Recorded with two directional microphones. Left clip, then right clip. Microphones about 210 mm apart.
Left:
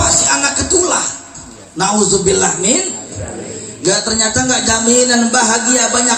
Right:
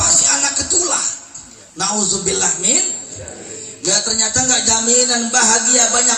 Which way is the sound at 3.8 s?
35° right (ahead or behind).